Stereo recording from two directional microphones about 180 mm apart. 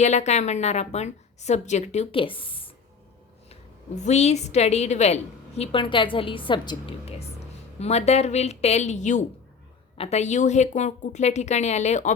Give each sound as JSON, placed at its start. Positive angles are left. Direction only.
{"t": 0.0, "sound": "a woman's voice", "side_deg": 40}